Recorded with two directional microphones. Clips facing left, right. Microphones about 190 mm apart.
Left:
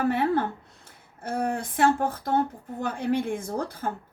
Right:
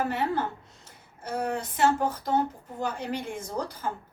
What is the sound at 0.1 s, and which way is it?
A woman's voice, 55° left (ahead or behind).